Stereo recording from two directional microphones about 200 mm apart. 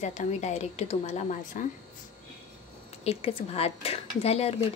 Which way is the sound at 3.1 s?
30° left (ahead or behind).